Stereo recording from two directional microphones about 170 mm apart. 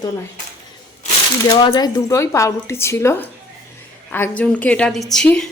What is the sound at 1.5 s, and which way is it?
A woman's voice, 25° left (ahead or behind).